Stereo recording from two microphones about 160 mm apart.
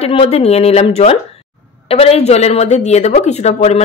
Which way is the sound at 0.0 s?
40° left (ahead or behind).